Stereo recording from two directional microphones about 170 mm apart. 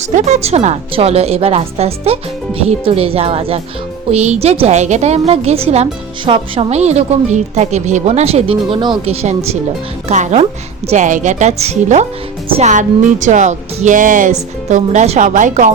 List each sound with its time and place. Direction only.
0.3 s a woman's voice: 40° right (ahead or behind)